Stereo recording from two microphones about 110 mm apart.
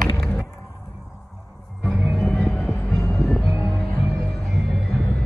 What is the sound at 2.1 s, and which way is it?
Music, 5° left (ahead or behind).